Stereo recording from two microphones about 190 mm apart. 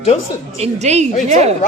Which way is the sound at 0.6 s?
35° right (ahead or behind).